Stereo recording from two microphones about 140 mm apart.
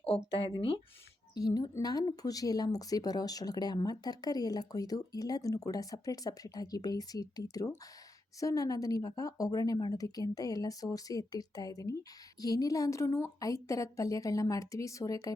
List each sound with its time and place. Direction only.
0.3 s speech: 40° left (ahead or behind)
1.3 s speech: 30° left (ahead or behind)